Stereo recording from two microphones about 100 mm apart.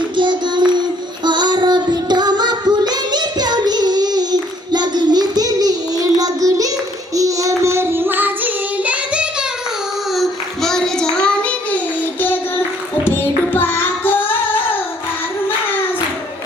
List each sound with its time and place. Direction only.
0.2 s child singing: 50° right (ahead or behind); by 9.5 s 10° right (ahead or behind)
10.2 s child singing: 5° left (ahead or behind)
13.1 s singing: 20° left (ahead or behind)